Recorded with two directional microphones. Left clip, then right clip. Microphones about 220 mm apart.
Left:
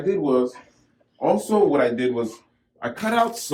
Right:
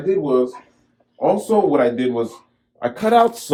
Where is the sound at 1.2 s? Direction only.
45° right (ahead or behind).